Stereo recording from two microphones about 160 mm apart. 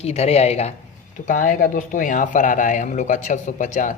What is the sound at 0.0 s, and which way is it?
Speech, 40° left (ahead or behind).